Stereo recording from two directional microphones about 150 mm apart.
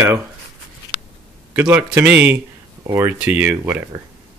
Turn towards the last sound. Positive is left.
turn(degrees=-10)  # may be behind; listen again after turning